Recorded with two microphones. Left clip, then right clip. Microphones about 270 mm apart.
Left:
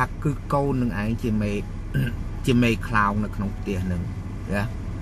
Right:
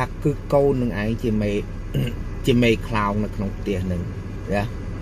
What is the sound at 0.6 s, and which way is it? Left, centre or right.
A man's voice, right.